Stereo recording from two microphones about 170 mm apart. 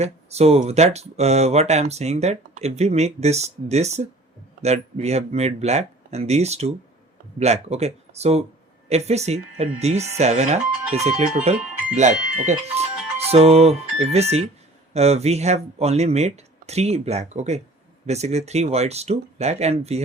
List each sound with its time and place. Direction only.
0.0 s speech: 40° right (ahead or behind)